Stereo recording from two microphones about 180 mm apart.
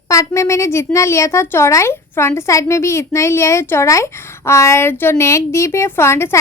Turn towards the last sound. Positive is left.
turn(degrees=15)  # may be behind; listen again after turning